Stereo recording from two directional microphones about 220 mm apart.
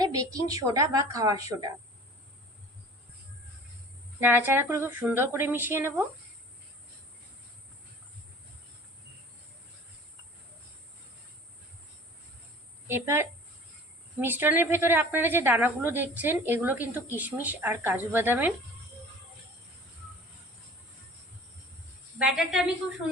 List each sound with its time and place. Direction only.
0.0 s a woman's voice: 15° right (ahead or behind)
4.2 s a woman's voice: 10° right (ahead or behind)
12.9 s a woman's voice: 10° right (ahead or behind)
22.2 s a woman's voice: 5° right (ahead or behind)